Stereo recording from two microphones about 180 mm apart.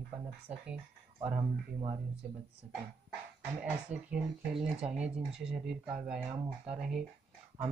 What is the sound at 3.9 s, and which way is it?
Speech, 5° right (ahead or behind).